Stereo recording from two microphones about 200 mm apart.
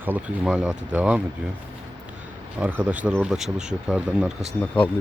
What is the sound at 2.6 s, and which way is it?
Speech, 5° right (ahead or behind).